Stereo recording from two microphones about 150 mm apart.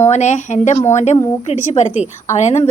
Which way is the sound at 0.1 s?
50° left (ahead or behind).